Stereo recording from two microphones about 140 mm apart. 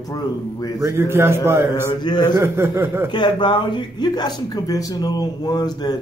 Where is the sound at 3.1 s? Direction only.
35° left (ahead or behind).